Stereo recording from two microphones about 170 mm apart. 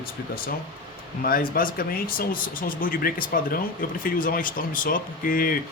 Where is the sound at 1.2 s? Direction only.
60° left (ahead or behind).